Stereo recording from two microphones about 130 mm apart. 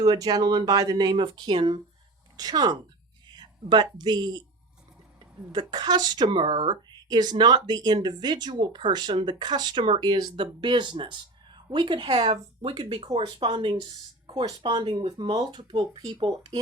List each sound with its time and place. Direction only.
0.0 s speech: 30° right (ahead or behind)
3.2 s a sound: 35° right (ahead or behind)
3.9 s speech: 35° right (ahead or behind)